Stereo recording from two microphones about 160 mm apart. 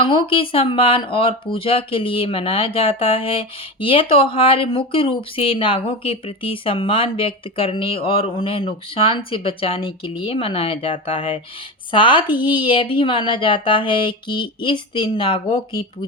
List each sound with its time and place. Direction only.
0.0 s speech: 30° left (ahead or behind)